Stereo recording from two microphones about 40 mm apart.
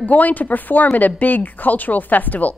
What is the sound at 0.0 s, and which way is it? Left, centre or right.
Speech, left.